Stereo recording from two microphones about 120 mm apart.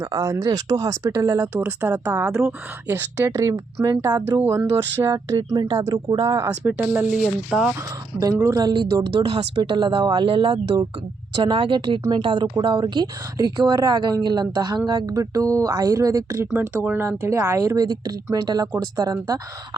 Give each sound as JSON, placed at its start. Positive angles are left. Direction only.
{"t": 0.0, "sound": "speech", "side_deg": -25}
{"t": 1.6, "sound": "speech", "side_deg": -15}
{"t": 2.8, "sound": "speech", "side_deg": -20}
{"t": 6.7, "sound": "speech", "side_deg": -10}
{"t": 7.8, "sound": "speech", "side_deg": -30}
{"t": 8.6, "sound": "speech", "side_deg": -40}